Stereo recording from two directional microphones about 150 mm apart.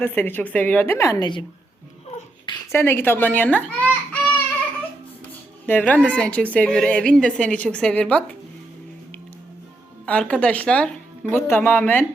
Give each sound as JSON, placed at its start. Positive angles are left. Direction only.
{"t": 0.0, "sound": "a woman's voice", "side_deg": 15}
{"t": 2.7, "sound": "a child's voice", "side_deg": 15}
{"t": 5.6, "sound": "a woman's voice", "side_deg": 10}
{"t": 10.1, "sound": "a woman's voice", "side_deg": 5}